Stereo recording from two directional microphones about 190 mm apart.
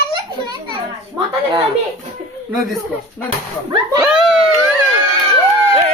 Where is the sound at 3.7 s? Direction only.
20° right (ahead or behind).